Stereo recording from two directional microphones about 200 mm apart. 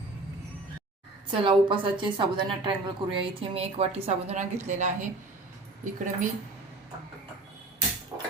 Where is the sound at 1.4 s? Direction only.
25° right (ahead or behind).